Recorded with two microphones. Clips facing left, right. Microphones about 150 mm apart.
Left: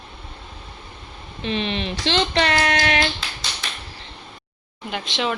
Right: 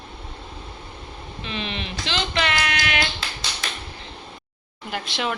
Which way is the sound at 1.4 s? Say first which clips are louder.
Left 7 dB; 35° left (ahead or behind).